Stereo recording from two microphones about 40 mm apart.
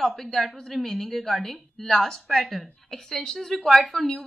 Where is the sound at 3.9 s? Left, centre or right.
Centre.